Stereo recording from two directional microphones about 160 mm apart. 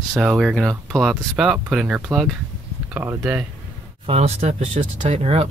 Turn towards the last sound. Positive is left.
turn(degrees=-40)  # may be behind; listen again after turning